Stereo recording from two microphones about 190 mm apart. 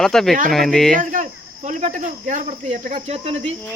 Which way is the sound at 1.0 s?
40° right (ahead or behind).